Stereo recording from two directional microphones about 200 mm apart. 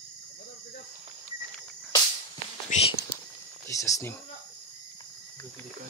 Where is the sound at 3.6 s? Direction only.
15° left (ahead or behind).